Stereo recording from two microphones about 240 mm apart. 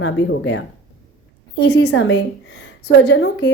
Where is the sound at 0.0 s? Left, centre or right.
Left.